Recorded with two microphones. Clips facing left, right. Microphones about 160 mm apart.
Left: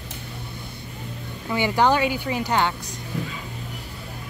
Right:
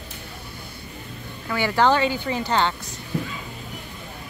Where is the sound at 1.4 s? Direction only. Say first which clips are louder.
Even; 15° left (ahead or behind).